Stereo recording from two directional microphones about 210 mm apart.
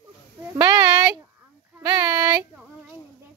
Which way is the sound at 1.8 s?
20° right (ahead or behind).